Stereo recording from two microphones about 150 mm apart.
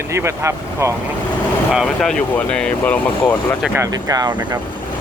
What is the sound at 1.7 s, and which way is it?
Speech, centre (ahead or behind).